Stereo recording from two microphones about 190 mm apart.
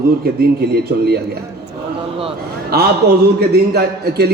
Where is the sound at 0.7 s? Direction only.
55° right (ahead or behind).